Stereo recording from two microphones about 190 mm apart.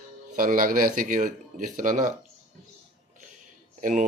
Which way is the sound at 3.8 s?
40° right (ahead or behind).